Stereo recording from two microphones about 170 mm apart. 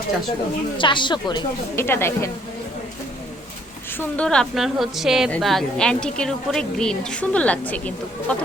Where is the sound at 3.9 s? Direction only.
10° left (ahead or behind).